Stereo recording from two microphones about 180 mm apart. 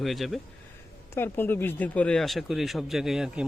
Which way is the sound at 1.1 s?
10° left (ahead or behind).